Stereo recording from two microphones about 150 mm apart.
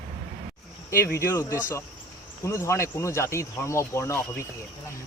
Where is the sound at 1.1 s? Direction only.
20° left (ahead or behind).